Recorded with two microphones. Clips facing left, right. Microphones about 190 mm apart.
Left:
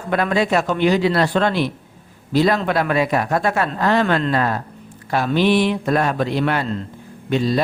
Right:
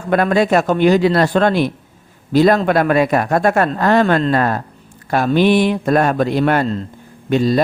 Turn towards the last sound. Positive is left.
turn(degrees=-45)  # may be behind; listen again after turning